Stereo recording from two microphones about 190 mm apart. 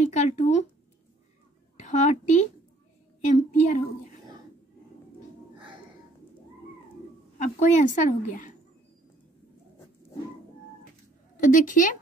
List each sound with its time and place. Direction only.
0.1 s a woman's voice: 35° left (ahead or behind)
1.8 s a woman's voice: 40° left (ahead or behind)
7.3 s a woman's voice: 40° left (ahead or behind)
11.3 s a woman's voice: 45° left (ahead or behind)